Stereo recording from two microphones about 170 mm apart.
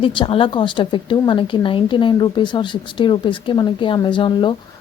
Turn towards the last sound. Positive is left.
turn(degrees=30)  # may be behind; listen again after turning